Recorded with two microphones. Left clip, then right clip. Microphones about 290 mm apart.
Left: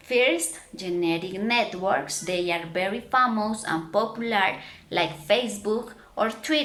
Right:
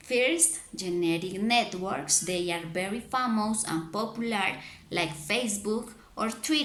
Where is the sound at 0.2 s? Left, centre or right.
Centre.